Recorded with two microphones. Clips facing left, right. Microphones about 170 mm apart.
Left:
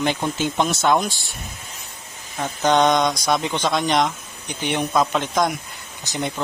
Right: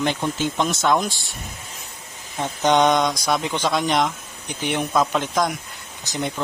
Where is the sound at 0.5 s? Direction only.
30° left (ahead or behind).